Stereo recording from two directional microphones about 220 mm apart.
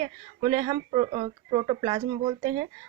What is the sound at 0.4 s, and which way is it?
Speech, 20° right (ahead or behind).